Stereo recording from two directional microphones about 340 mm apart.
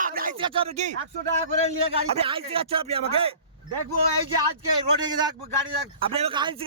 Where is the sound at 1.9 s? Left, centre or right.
Centre.